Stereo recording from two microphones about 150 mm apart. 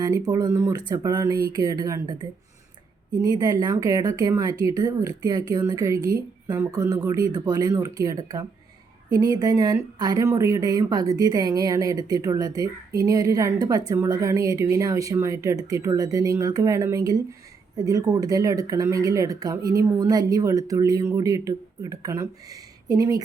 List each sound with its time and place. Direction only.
0.3 s speech: 25° right (ahead or behind)
3.2 s speech: 25° right (ahead or behind)